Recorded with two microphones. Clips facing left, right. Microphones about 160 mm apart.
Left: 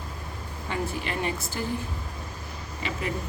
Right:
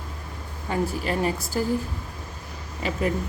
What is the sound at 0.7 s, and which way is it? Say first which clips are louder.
Speech: right 5 dB; 40° right (ahead or behind).